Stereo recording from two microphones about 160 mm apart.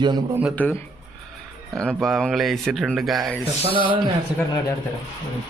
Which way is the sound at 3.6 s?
35° right (ahead or behind).